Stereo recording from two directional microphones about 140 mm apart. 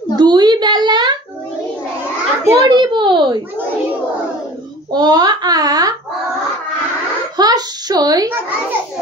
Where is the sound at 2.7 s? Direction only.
35° right (ahead or behind).